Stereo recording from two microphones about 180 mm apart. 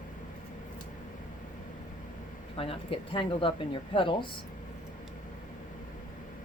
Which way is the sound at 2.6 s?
30° left (ahead or behind).